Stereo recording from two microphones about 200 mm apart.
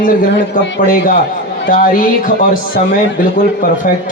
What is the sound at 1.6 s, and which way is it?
Speech, 45° left (ahead or behind).